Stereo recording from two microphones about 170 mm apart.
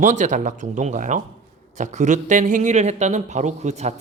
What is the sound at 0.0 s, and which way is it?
Speech, 45° right (ahead or behind).